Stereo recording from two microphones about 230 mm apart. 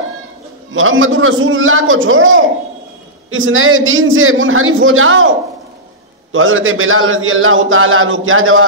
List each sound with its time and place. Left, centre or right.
0.7 s a man's voice: right
6.3 s a man's voice: right